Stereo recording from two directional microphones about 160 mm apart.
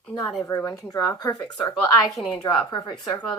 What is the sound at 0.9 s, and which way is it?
A woman's voice, 25° left (ahead or behind).